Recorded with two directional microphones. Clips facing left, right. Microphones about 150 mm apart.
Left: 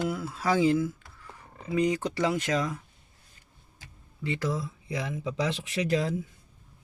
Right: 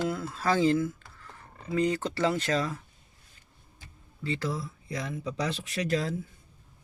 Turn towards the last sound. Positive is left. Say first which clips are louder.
# left 2 dB
turn(degrees=15)  # may be behind; listen again after turning